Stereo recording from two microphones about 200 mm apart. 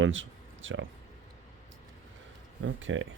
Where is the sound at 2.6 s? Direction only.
75° right (ahead or behind).